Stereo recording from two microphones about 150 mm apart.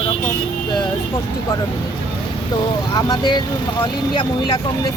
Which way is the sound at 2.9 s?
30° left (ahead or behind).